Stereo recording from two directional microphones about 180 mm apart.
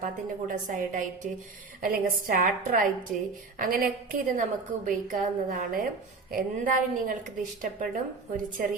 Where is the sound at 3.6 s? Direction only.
50° right (ahead or behind).